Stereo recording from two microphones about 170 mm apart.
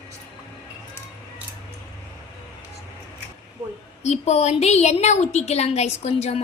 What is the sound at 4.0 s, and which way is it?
A woman's voice, 40° left (ahead or behind).